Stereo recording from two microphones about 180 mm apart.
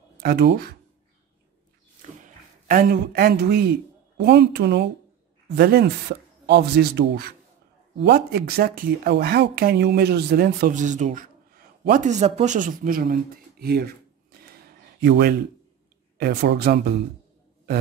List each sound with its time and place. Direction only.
0.2 s speech: 65° right (ahead or behind)
2.0 s a sound: 45° right (ahead or behind); by 3.7 s 65° right (ahead or behind)
4.2 s speech: 65° right (ahead or behind)